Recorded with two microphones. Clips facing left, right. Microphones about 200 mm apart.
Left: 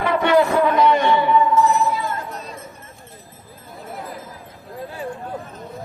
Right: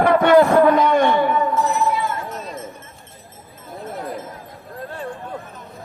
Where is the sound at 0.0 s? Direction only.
45° right (ahead or behind).